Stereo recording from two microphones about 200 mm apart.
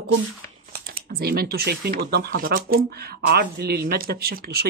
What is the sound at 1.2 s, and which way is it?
Speech, 50° right (ahead or behind).